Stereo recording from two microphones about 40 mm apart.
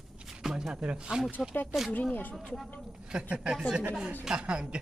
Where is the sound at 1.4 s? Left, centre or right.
Centre.